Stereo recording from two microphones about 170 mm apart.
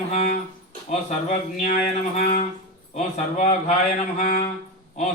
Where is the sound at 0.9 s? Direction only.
45° left (ahead or behind).